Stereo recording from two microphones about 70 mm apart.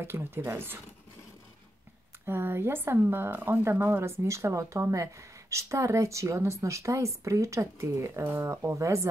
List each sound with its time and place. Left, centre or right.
0.0 s speech: right
2.2 s speech: right